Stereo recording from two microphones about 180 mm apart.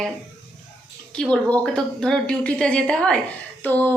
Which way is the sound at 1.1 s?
5° left (ahead or behind).